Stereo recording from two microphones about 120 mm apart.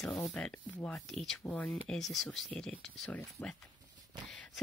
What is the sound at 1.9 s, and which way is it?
Speech, centre (ahead or behind).